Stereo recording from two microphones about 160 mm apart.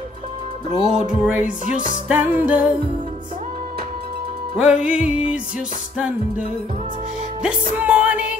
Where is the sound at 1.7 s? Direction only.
55° right (ahead or behind).